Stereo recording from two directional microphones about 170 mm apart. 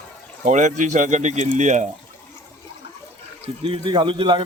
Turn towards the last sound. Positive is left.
turn(degrees=-30)  # may be behind; listen again after turning